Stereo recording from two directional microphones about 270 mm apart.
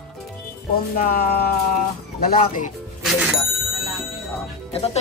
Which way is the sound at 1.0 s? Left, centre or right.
Left.